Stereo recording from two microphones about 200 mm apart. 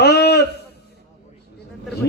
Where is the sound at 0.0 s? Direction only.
55° left (ahead or behind).